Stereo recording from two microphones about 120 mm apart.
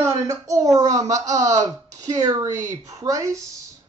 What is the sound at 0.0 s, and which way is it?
A woman's voice, 25° right (ahead or behind).